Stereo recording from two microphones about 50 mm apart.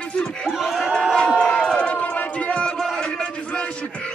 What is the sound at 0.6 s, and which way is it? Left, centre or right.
Crowd, centre.